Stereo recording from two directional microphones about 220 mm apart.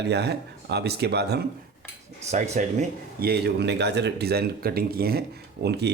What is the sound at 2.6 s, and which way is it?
Speech, 35° right (ahead or behind).